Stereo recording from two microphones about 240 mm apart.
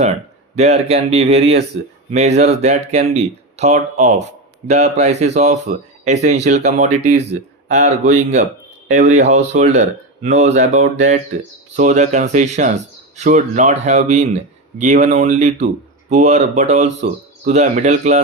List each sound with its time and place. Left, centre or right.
0.0 s speech: right